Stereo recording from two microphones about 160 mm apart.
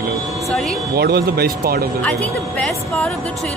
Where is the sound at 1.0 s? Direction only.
80° right.